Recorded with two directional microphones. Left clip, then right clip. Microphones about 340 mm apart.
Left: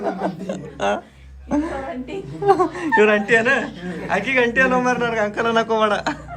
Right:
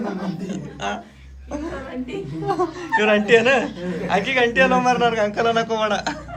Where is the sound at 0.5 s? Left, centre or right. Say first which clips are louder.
Left 5 dB; centre.